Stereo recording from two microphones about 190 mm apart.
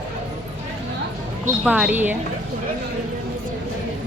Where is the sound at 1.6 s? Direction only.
10° right (ahead or behind).